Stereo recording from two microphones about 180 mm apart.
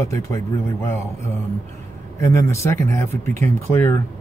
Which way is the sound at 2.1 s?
15° left (ahead or behind).